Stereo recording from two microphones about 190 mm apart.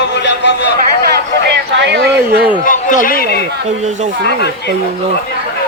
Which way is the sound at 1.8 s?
60° right (ahead or behind).